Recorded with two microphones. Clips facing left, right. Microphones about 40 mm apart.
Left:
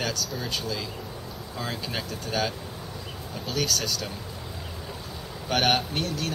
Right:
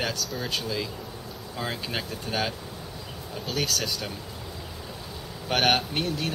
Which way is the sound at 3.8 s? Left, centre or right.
Centre.